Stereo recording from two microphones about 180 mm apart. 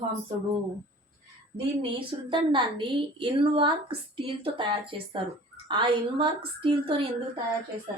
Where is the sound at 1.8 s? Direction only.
30° right (ahead or behind).